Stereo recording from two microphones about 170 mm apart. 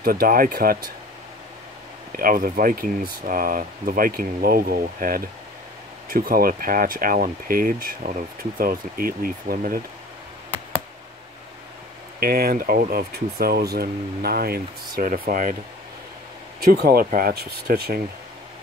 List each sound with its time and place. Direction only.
0.0 s speech: 60° right (ahead or behind)
2.1 s speech: 55° right (ahead or behind)
12.2 s speech: 60° right (ahead or behind)
16.5 s speech: 65° right (ahead or behind)